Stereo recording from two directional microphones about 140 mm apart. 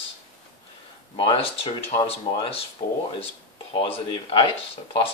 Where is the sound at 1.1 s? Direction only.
40° left (ahead or behind).